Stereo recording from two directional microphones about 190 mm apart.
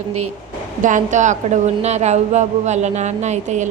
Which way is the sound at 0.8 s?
40° right (ahead or behind).